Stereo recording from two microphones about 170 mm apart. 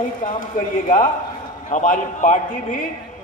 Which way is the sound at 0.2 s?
50° left (ahead or behind).